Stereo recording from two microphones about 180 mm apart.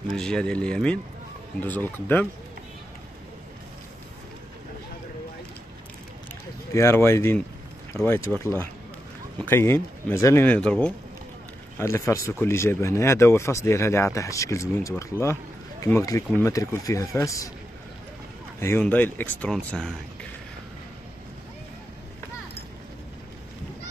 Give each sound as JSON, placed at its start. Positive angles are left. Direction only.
{"t": 0.1, "sound": "speech", "side_deg": 5}
{"t": 6.7, "sound": "speech", "side_deg": 15}
{"t": 9.4, "sound": "speech", "side_deg": 10}
{"t": 18.6, "sound": "speech", "side_deg": 10}